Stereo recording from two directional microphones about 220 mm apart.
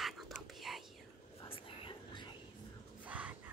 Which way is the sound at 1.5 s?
25° left (ahead or behind).